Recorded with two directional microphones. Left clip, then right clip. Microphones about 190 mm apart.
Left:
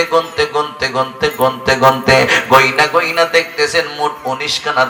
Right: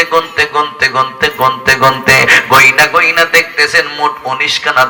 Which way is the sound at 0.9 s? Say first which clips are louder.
Right 4 dB; 25° right (ahead or behind).